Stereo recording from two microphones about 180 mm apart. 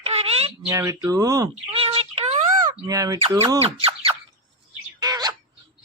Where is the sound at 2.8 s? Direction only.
20° right (ahead or behind).